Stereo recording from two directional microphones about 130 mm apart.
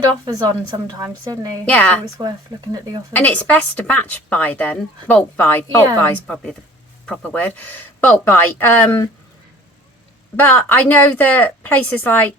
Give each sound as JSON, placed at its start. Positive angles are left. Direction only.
{"t": 0.3, "sound": "a woman's voice", "side_deg": -30}
{"t": 1.6, "sound": "speech", "side_deg": 10}
{"t": 3.1, "sound": "speech", "side_deg": 10}
{"t": 10.3, "sound": "speech", "side_deg": 15}